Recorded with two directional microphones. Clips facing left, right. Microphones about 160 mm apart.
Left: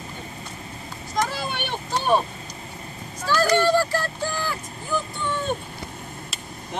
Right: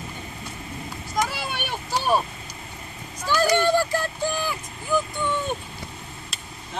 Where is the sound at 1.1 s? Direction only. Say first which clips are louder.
Left 1 dB; 10° right (ahead or behind).